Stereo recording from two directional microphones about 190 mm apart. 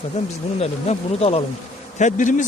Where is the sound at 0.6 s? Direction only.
30° left (ahead or behind).